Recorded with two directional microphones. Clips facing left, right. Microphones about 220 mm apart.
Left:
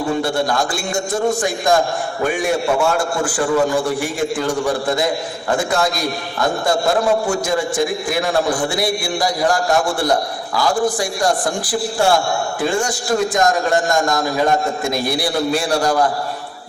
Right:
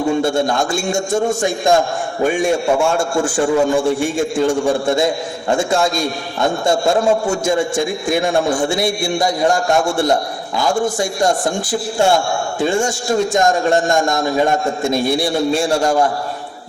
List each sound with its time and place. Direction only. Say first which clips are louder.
0.3 s a man's voice: right 2 dB; 25° right (ahead or behind)